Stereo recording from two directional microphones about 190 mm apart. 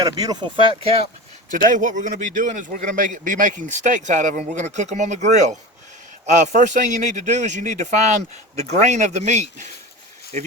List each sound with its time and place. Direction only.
0.0 s speech: 20° right (ahead or behind)
1.7 s a man's voice: 40° right (ahead or behind)